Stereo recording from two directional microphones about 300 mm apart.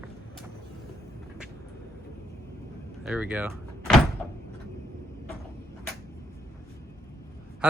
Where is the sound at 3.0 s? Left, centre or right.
Centre.